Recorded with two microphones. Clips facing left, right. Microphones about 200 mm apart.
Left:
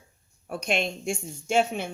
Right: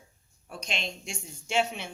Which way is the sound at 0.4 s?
55° left (ahead or behind).